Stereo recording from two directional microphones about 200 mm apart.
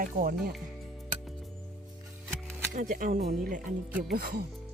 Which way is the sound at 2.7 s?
40° right (ahead or behind).